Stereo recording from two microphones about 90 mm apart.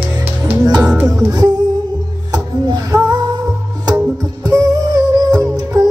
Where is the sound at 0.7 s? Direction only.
40° right (ahead or behind).